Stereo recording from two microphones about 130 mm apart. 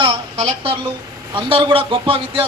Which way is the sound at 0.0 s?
55° right (ahead or behind).